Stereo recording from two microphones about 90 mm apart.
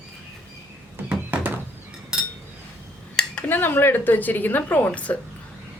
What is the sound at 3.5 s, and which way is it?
A woman's voice, 25° left (ahead or behind).